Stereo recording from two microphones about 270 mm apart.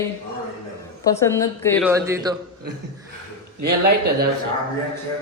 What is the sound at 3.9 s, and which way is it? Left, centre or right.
Speech, right.